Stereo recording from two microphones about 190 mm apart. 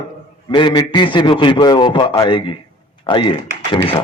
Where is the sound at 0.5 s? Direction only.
25° left (ahead or behind).